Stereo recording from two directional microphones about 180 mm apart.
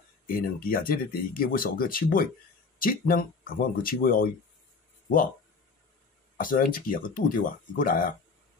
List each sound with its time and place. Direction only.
0.3 s speech: 50° left (ahead or behind)
6.3 s speech: 50° left (ahead or behind)